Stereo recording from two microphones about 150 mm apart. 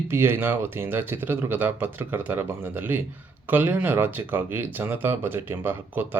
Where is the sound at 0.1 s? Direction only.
15° right (ahead or behind).